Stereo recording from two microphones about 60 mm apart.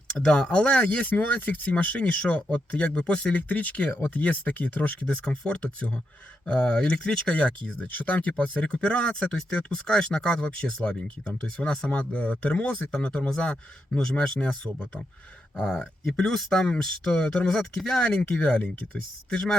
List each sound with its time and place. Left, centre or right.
0.1 s speech: centre
11.9 s speech: left